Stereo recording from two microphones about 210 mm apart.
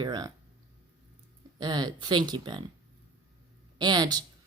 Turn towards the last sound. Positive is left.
turn(degrees=-20)  # may be behind; listen again after turning